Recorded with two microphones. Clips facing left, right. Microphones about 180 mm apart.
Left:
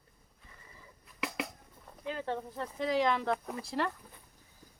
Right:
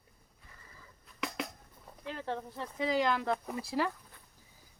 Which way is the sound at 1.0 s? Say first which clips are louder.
Left 1 dB; 5° left (ahead or behind).